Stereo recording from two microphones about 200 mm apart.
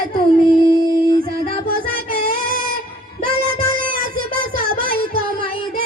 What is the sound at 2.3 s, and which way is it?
Child singing, 45° right (ahead or behind).